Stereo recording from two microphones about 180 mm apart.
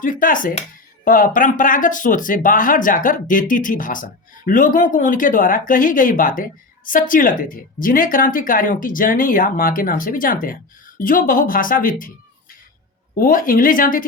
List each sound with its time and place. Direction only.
0.0 s speech: 50° left (ahead or behind)
13.1 s speech: 50° left (ahead or behind)